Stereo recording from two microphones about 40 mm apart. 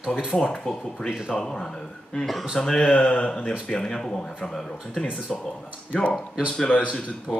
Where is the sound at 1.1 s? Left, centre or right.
Centre.